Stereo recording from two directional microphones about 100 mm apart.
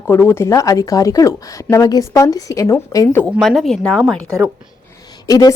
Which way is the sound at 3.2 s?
Centre (ahead or behind).